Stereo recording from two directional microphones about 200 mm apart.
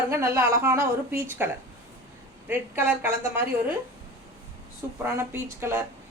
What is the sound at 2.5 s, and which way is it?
Speech, 10° right (ahead or behind).